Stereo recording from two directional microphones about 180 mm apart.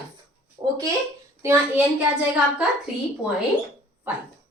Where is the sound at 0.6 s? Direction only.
20° right (ahead or behind).